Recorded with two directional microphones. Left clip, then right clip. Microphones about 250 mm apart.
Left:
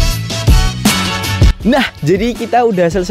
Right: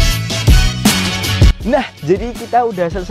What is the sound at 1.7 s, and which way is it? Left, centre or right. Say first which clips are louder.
Speech: left 2 dB; left.